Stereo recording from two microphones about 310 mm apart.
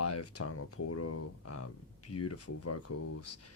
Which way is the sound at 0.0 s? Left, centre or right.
Left.